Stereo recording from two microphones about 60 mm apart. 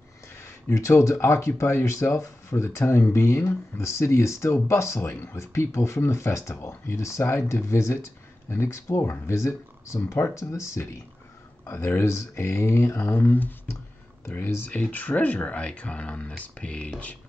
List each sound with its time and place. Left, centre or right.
0.3 s speech: left
14.7 s speech: left